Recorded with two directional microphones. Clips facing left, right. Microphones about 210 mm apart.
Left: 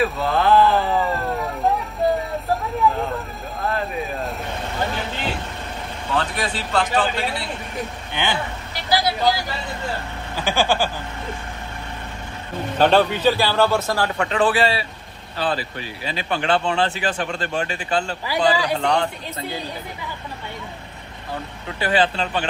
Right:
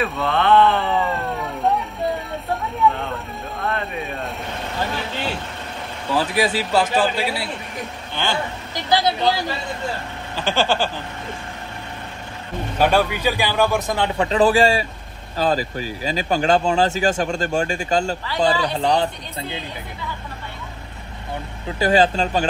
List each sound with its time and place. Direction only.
0.0 s a sound: centre (ahead or behind)
2.8 s vehicle: centre (ahead or behind)
6.1 s speech: 5° right (ahead or behind)
8.1 s a woman's voice: 15° left (ahead or behind)
8.7 s vehicle: 20° right (ahead or behind)
10.3 s speech: 10° left (ahead or behind)
12.7 s a man's voice: 10° right (ahead or behind)
14.3 s speech: 40° right (ahead or behind)
21.7 s speech: 40° right (ahead or behind)